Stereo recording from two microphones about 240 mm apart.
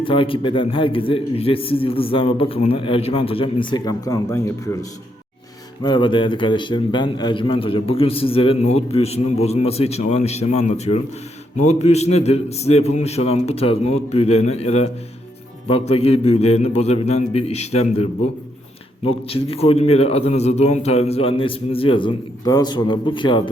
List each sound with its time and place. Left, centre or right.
0.0 s a man's voice: left